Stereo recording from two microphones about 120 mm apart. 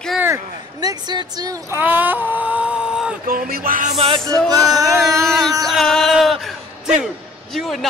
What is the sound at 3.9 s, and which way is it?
Music, 50° right (ahead or behind).